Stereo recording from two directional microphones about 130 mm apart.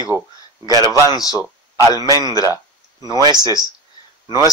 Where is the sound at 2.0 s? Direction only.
30° right (ahead or behind).